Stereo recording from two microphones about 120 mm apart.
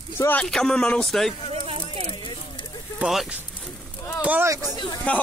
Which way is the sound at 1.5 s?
55° right (ahead or behind).